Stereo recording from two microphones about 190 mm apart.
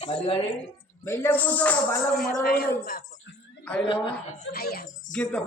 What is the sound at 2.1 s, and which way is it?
Speech, 50° left (ahead or behind).